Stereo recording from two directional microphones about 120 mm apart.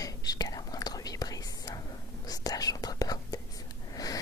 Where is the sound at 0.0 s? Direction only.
30° left (ahead or behind).